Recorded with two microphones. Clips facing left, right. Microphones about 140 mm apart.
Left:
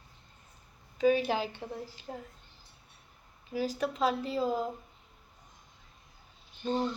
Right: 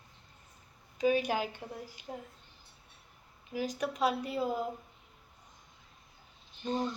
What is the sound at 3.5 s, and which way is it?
Speech, 15° right (ahead or behind).